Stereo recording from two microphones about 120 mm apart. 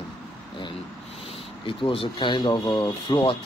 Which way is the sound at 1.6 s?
50° left (ahead or behind).